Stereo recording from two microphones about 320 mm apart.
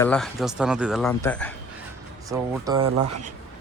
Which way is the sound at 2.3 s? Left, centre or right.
Centre.